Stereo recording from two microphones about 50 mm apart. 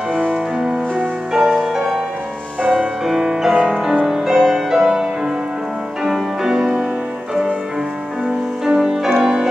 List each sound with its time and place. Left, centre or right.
0.1 s music: centre
3.1 s music: centre
6.0 s music: centre
8.6 s music: centre